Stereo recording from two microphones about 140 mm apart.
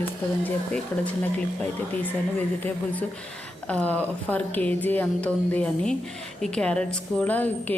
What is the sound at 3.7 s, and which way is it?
Speech, 10° left (ahead or behind).